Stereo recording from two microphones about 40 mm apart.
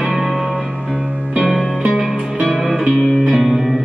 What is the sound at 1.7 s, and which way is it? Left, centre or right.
Music, centre.